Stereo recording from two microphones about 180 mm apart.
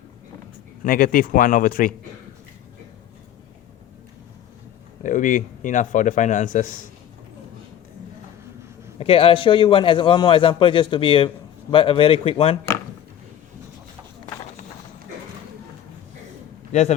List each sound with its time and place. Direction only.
0.9 s a man's voice: 55° left (ahead or behind)
5.0 s a man's voice: 45° left (ahead or behind)
9.0 s a man's voice: 30° left (ahead or behind)
16.7 s speech: 40° left (ahead or behind)